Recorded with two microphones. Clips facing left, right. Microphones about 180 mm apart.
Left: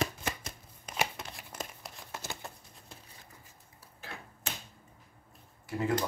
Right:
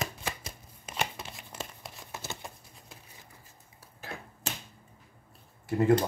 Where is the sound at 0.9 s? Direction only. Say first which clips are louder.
Even; 5° right (ahead or behind).